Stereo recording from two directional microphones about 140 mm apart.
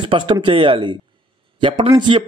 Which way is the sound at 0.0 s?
35° right (ahead or behind).